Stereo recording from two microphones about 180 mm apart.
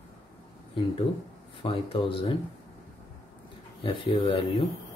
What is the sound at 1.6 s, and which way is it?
Speech, 30° left (ahead or behind).